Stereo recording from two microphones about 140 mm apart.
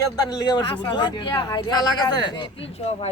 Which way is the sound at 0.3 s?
30° left (ahead or behind).